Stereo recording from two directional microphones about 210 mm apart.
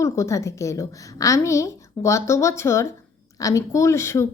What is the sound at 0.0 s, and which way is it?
A woman's voice, 15° left (ahead or behind).